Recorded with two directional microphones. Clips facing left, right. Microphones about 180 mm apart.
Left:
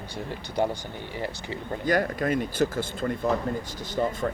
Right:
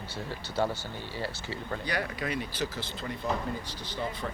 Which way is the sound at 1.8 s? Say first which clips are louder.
Left 10 dB; 45° left (ahead or behind).